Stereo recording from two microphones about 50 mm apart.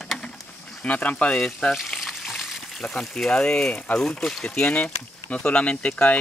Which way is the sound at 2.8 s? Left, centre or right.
Centre.